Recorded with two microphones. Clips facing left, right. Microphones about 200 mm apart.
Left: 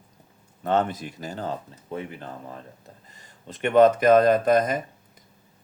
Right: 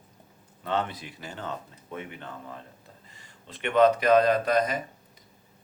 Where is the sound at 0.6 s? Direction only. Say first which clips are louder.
Left 6 dB; 45° left (ahead or behind).